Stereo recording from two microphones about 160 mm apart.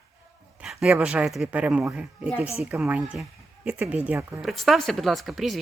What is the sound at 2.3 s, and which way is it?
Speech, 40° left (ahead or behind).